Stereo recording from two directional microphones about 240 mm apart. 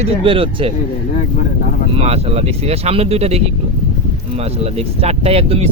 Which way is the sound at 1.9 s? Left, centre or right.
Right.